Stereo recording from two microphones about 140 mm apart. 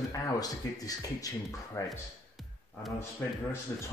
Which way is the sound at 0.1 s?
25° left (ahead or behind).